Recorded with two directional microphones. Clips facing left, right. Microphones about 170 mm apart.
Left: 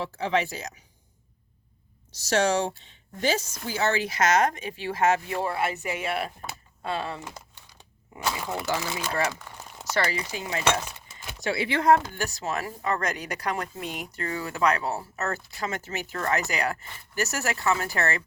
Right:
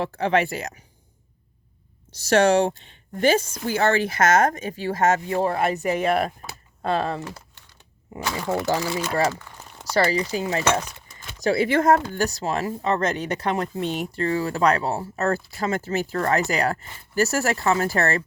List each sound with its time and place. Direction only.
0.0 s speech: 60° right (ahead or behind)
2.1 s speech: 60° right (ahead or behind); by 7.2 s 40° right (ahead or behind)
8.6 s speech: 35° right (ahead or behind)
9.3 s a sound: 10° left (ahead or behind)
9.9 s speech: 30° right (ahead or behind)